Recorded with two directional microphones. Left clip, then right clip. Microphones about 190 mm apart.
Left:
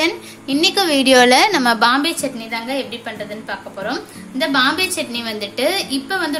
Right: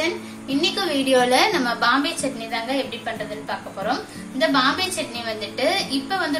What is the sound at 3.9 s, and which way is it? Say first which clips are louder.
A woman's voice: right 1 dB; 45° left (ahead or behind).